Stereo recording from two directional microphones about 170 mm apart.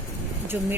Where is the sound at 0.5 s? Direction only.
15° right (ahead or behind).